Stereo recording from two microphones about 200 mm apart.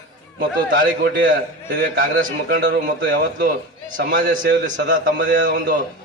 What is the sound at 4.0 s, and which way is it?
Speech, 45° right (ahead or behind).